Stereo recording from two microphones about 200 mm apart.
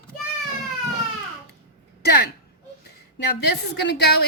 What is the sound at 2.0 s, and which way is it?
A woman's voice, 50° left (ahead or behind).